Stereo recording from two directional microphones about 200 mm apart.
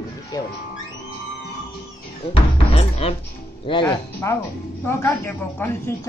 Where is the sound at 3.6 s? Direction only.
25° left (ahead or behind).